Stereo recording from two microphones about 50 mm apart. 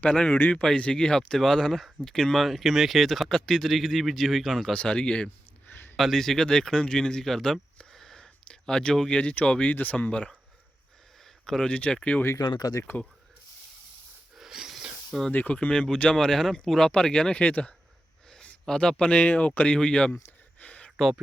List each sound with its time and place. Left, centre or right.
0.1 s speech: centre
4.7 s speech: centre
5.6 s a sound: left
6.0 s speech: centre; by 10.1 s left
10.1 s speech: centre
11.4 s speech: centre
12.9 s speech: left
14.3 s a sound: centre
15.3 s speech: left
15.7 s speech: left
16.1 s speech: centre
17.3 s speech: left
18.6 s speech: centre
20.6 s a sound: left